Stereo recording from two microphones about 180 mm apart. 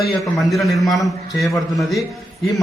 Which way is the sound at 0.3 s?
Centre (ahead or behind).